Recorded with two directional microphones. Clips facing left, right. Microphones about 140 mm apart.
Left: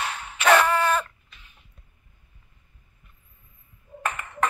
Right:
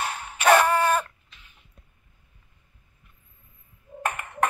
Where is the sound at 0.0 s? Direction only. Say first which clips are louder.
Right 1 dB; 45° right (ahead or behind).